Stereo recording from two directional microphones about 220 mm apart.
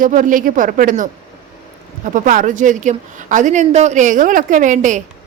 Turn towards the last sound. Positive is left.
turn(degrees=-35)  # may be behind; listen again after turning